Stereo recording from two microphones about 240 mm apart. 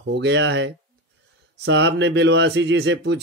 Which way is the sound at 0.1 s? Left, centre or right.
Right.